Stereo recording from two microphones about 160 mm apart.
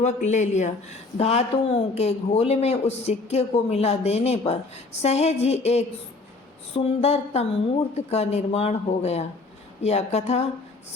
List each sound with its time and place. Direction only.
0.0 s a man's voice: 45° left (ahead or behind)